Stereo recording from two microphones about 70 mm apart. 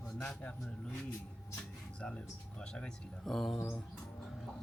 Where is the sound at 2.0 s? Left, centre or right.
Centre.